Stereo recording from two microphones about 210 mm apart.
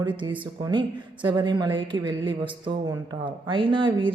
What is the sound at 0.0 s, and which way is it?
A woman's voice, 25° right (ahead or behind).